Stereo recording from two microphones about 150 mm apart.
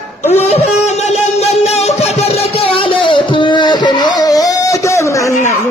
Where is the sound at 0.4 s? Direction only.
45° left (ahead or behind); by 5.6 s 20° left (ahead or behind).